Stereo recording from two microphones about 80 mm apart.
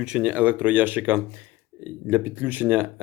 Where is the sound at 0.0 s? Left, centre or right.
Centre.